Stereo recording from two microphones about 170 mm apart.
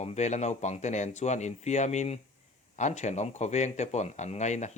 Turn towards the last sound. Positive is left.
turn(degrees=45)  # may be behind; listen again after turning